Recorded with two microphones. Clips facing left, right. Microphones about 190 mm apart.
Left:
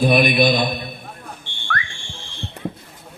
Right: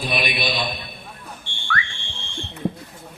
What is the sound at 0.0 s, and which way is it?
Speech, 45° left (ahead or behind).